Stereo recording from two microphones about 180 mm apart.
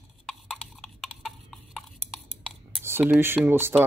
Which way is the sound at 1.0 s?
Centre (ahead or behind).